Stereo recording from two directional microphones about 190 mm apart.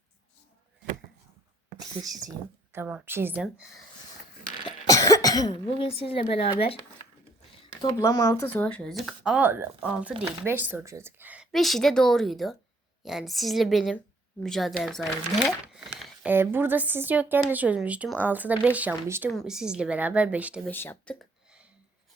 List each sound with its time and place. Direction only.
2.7 s a woman's voice: 10° right (ahead or behind)
4.6 s speech: 15° left (ahead or behind)
7.8 s a woman's voice: 20° left (ahead or behind); by 20.7 s 5° right (ahead or behind)
20.7 s speech: 10° left (ahead or behind)